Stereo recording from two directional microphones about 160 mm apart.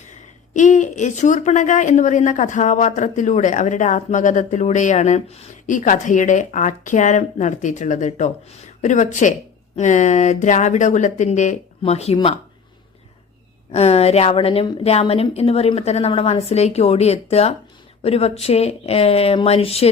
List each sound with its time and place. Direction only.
0.1 s a woman's voice: 50° left (ahead or behind)
13.7 s a woman's voice: 40° left (ahead or behind)